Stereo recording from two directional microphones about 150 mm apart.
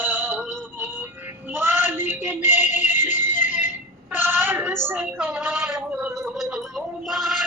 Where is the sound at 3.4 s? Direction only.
55° left (ahead or behind).